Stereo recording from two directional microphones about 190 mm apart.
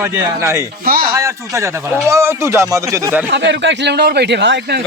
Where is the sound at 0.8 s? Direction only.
50° right (ahead or behind).